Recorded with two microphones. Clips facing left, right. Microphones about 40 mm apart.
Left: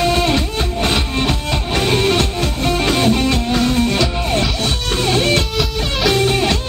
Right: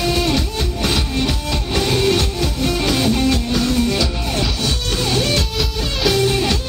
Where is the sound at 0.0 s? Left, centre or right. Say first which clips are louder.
Left 3 dB; left.